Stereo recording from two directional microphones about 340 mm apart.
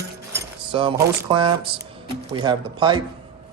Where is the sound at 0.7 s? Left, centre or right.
Centre.